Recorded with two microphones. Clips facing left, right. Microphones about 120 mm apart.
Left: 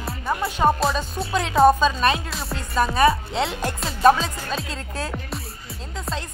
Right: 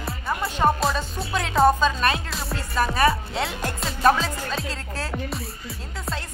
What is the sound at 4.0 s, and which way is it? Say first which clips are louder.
Speech: left 3 dB; 20° left (ahead or behind).